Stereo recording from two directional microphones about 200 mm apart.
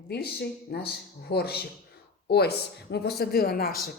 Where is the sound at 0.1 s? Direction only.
55° left (ahead or behind).